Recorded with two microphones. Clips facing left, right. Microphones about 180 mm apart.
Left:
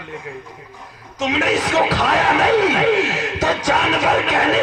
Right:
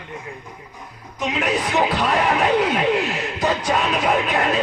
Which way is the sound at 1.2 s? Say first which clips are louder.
Left 3 dB; 90° left.